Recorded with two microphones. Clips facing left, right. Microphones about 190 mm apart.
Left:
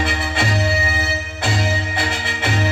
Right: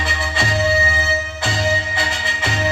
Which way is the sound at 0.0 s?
55° left (ahead or behind).